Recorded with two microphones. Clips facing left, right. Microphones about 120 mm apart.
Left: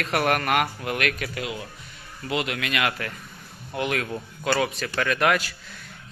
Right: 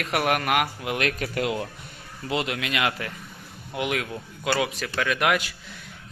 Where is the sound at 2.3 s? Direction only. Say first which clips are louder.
Even; 25° right (ahead or behind).